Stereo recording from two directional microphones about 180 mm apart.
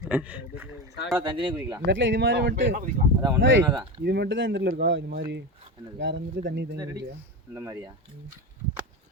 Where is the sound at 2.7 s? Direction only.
50° right (ahead or behind).